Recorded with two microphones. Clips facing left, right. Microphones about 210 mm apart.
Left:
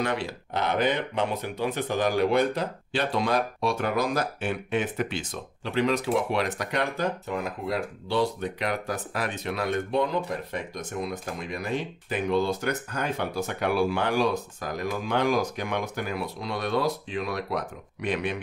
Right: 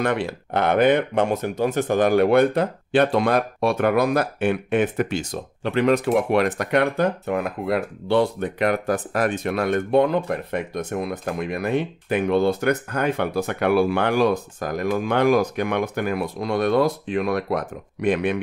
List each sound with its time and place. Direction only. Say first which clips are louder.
0.0 s speech: right 5 dB; 55° right (ahead or behind)